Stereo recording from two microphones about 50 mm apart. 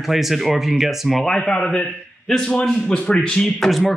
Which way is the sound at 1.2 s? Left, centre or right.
Centre.